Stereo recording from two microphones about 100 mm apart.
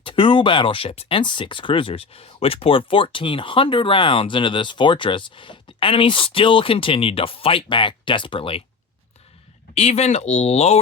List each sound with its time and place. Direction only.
0.0 s speech: 60° left (ahead or behind)
9.7 s speech: 90° left